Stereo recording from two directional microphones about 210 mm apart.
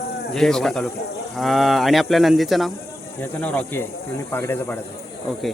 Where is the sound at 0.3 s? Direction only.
Centre (ahead or behind).